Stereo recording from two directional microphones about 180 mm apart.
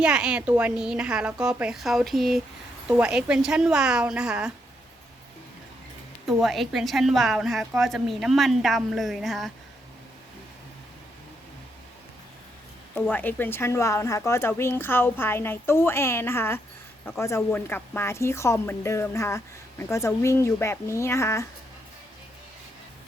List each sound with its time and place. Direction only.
0.0 s a woman's voice: 5° right (ahead or behind)
6.2 s a woman's voice: centre (ahead or behind)
12.9 s a woman's voice: 10° left (ahead or behind)